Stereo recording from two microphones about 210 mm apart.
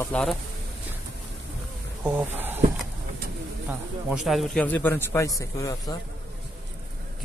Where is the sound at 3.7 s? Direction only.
5° right (ahead or behind); by 6.0 s 15° left (ahead or behind).